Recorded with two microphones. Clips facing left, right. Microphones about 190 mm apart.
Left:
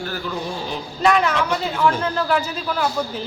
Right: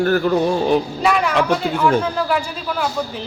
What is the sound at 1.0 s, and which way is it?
Speech, 5° right (ahead or behind).